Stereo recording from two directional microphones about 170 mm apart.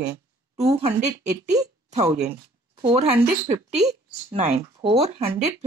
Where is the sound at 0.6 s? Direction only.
35° right (ahead or behind).